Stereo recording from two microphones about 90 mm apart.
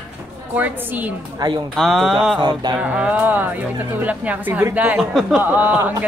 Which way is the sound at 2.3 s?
55° right (ahead or behind).